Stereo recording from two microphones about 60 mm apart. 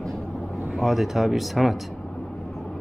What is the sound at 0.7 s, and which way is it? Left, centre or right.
Speech, centre.